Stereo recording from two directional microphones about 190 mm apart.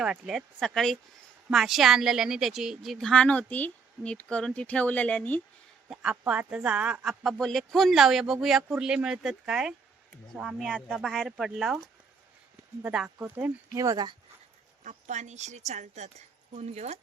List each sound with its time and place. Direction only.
0.0 s a woman's voice: 5° right (ahead or behind)
5.9 s a woman's voice: 5° right (ahead or behind)
12.8 s speech: 5° right (ahead or behind); by 14.2 s 20° right (ahead or behind)
14.8 s a woman's voice: 40° right (ahead or behind)